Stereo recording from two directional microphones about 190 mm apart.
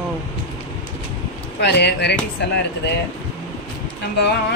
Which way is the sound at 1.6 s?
60° left (ahead or behind).